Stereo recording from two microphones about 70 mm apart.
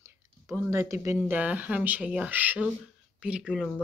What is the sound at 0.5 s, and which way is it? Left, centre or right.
Speech, right.